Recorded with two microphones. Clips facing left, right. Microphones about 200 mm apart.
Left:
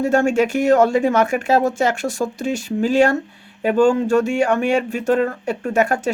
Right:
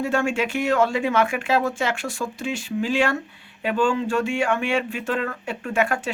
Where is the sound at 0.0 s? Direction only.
40° left (ahead or behind).